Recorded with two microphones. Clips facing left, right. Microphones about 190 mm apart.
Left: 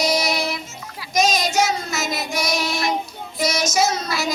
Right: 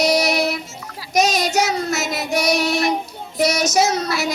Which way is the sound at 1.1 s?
70° right (ahead or behind).